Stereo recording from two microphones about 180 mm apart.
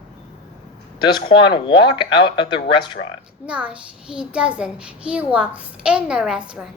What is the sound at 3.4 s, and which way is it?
A child's voice, 5° right (ahead or behind).